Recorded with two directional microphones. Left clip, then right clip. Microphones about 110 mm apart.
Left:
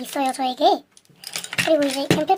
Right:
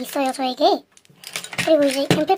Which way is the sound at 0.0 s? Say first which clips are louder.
Right 1 dB; 5° right (ahead or behind).